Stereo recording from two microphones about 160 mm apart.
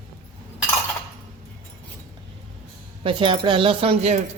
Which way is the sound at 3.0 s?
35° right (ahead or behind).